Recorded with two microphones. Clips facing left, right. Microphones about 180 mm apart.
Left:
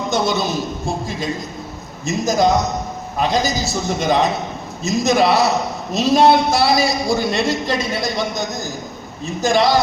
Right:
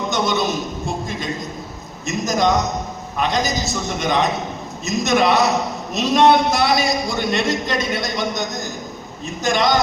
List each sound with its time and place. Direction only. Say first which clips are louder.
0.1 s a man's voice: left 2 dB; 30° left (ahead or behind)